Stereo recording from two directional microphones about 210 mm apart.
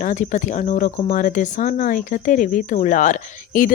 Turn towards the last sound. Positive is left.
turn(degrees=40)  # may be behind; listen again after turning